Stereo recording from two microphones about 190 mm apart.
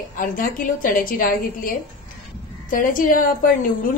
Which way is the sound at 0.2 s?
45° left (ahead or behind).